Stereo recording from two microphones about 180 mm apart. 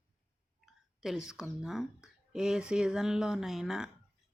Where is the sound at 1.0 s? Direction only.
5° right (ahead or behind).